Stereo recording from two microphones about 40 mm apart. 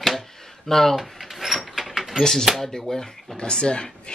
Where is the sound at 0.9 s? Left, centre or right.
Centre.